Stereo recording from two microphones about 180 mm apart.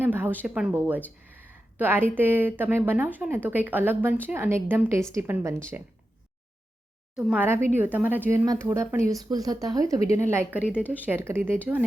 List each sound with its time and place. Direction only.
0.0 s speech: 10° right (ahead or behind)
7.2 s speech: 5° right (ahead or behind)
10.0 s a woman's voice: 35° left (ahead or behind)
10.5 s speech: 5° right (ahead or behind)